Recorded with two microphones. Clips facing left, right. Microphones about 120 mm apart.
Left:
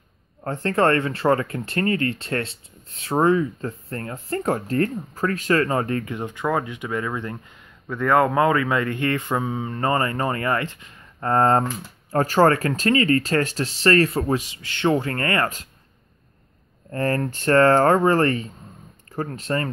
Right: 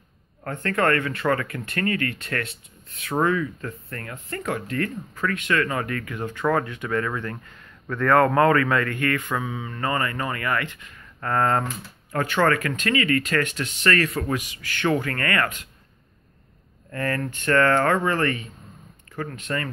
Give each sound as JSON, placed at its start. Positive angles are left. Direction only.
{"t": 0.4, "sound": "speech", "side_deg": 30}
{"t": 16.9, "sound": "speech", "side_deg": 35}